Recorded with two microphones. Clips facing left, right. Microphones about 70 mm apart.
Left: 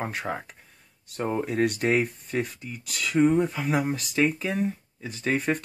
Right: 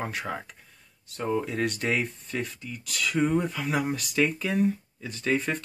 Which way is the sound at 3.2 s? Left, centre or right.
Centre.